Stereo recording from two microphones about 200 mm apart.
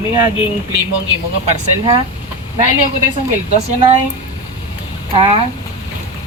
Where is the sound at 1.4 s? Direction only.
25° right (ahead or behind).